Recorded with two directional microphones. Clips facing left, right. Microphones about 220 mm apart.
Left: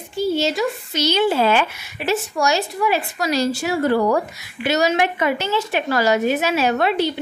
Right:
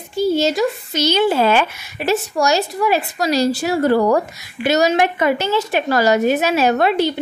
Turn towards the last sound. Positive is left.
turn(degrees=-45)  # may be behind; listen again after turning